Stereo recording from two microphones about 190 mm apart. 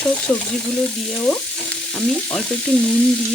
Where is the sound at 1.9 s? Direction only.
5° left (ahead or behind).